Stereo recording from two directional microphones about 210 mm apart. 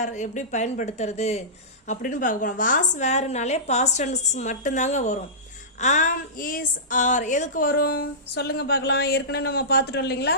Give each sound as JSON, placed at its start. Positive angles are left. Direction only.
{"t": 0.0, "sound": "a woman's voice", "side_deg": 35}